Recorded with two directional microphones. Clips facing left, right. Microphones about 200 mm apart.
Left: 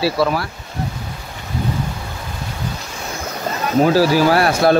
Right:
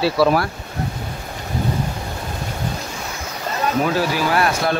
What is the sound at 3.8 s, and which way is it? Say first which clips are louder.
Speech: left 9 dB; 35° left (ahead or behind).